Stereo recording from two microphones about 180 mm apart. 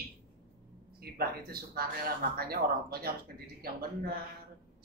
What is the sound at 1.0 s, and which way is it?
A woman's voice, 60° right (ahead or behind).